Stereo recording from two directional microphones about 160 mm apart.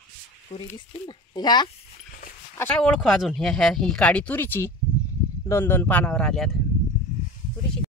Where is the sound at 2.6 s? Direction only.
10° left (ahead or behind).